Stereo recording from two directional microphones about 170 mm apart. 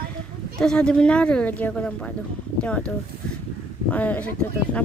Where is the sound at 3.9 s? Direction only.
10° left (ahead or behind).